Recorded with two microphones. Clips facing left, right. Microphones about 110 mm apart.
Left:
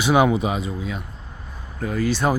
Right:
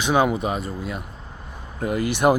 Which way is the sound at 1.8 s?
15° right (ahead or behind).